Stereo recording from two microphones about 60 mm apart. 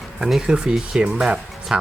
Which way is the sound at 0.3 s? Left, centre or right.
Centre.